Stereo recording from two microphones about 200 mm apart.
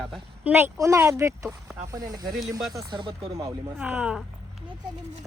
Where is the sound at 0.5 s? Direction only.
15° right (ahead or behind).